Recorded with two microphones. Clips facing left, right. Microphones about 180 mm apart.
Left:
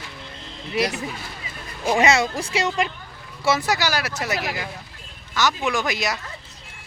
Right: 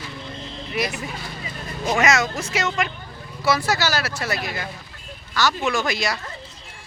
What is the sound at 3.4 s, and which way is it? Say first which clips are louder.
Speech: even; 20° left (ahead or behind).